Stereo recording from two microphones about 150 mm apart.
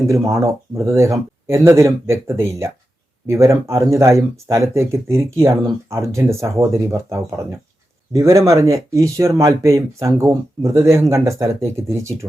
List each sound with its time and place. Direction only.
0.0 s speech: 20° right (ahead or behind)